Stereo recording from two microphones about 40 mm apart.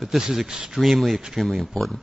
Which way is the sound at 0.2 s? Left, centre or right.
Centre.